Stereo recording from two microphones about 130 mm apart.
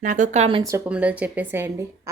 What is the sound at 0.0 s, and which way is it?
Speech, 80° right.